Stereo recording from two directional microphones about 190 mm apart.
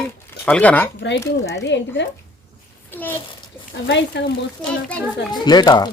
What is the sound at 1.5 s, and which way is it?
Speech, 65° left (ahead or behind).